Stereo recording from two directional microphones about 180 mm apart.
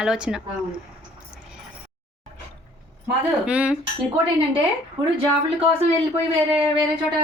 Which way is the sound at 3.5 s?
5° right (ahead or behind).